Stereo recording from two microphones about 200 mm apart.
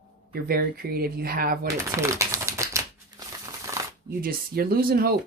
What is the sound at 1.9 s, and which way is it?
Crumpling, 15° right (ahead or behind).